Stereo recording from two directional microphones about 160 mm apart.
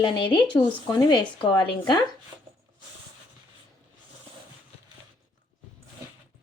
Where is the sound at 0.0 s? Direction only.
30° left (ahead or behind).